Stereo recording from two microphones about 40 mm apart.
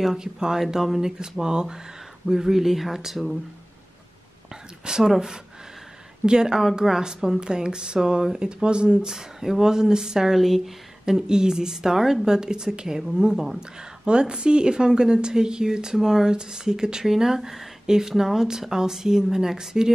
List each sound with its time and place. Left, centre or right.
0.0 s a woman's voice: centre
1.4 s a woman's voice: centre
4.8 s a woman's voice: centre
9.1 s a woman's voice: centre
11.1 s a woman's voice: centre